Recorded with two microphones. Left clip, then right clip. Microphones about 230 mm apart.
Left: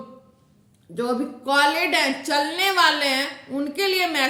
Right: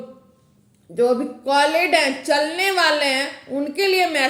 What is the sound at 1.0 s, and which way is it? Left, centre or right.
A woman's voice, centre.